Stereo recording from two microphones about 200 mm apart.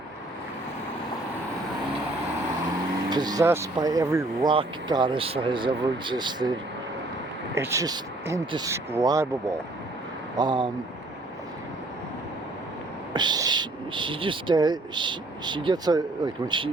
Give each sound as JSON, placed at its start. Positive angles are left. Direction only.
{"t": 3.1, "sound": "speech", "side_deg": -20}
{"t": 7.5, "sound": "speech", "side_deg": -15}
{"t": 13.1, "sound": "speech", "side_deg": -20}